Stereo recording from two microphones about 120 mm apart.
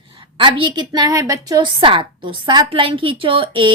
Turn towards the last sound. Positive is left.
turn(degrees=-45)  # may be behind; listen again after turning